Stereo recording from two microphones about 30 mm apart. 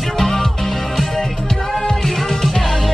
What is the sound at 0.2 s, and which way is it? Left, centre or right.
Music, centre.